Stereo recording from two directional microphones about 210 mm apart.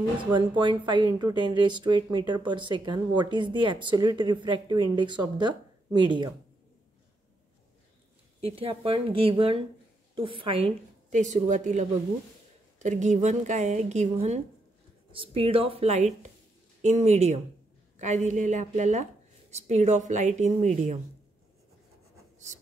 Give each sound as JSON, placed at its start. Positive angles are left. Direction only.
{"t": 0.2, "sound": "speech", "side_deg": -20}
{"t": 8.5, "sound": "a woman's voice", "side_deg": -25}
{"t": 15.1, "sound": "a woman's voice", "side_deg": -25}